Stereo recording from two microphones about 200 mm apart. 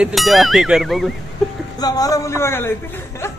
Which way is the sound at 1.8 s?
20° left (ahead or behind).